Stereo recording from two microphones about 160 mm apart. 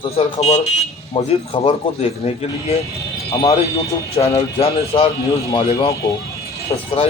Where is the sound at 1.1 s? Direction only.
30° left (ahead or behind).